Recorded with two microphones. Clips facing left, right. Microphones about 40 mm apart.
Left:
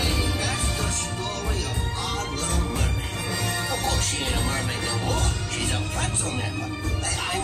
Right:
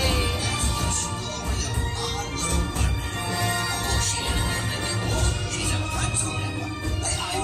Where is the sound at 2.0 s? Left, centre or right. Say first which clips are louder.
Left 2 dB; left.